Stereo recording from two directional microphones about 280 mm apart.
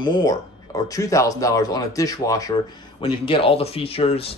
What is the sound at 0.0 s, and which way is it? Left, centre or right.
Speech, centre.